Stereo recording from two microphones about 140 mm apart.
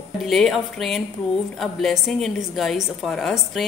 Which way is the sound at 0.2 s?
Centre (ahead or behind).